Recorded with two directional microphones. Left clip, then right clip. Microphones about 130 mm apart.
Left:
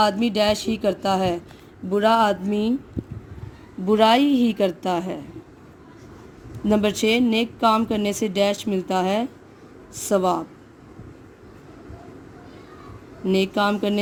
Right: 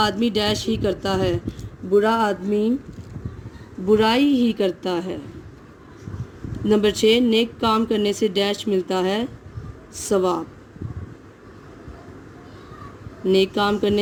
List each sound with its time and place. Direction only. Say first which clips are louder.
0.0 s speech: left 1 dB; 60° left (ahead or behind)
3.8 s speech: left 1 dB; 65° left (ahead or behind)
6.7 s speech: right 3 dB; 50° left (ahead or behind)
13.2 s speech: right 2 dB; 50° left (ahead or behind)